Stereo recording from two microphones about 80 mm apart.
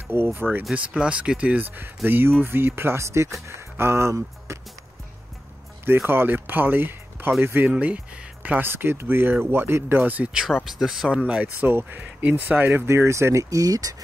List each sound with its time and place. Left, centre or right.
0.1 s speech: right
5.9 s speech: right
10.4 s speech: centre
11.6 s speech: right